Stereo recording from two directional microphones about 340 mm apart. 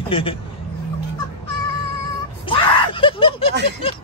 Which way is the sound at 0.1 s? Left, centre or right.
Centre.